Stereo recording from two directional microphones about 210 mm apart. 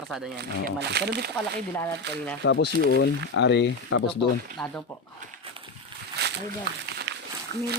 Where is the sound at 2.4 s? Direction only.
60° left (ahead or behind).